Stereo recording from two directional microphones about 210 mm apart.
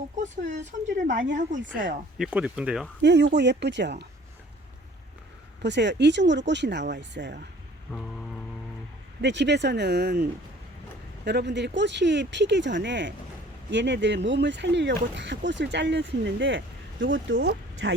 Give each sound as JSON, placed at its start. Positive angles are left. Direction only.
{"t": 0.2, "sound": "speech", "side_deg": -35}
{"t": 2.1, "sound": "speech", "side_deg": -5}
{"t": 3.0, "sound": "speech", "side_deg": -55}
{"t": 5.6, "sound": "speech", "side_deg": -55}
{"t": 7.9, "sound": "music", "side_deg": 0}
{"t": 9.2, "sound": "speech", "side_deg": -55}
{"t": 11.3, "sound": "speech", "side_deg": -55}